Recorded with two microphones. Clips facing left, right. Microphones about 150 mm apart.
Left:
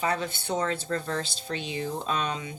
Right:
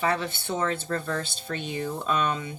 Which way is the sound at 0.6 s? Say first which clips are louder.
Right 3 dB; 50° right (ahead or behind).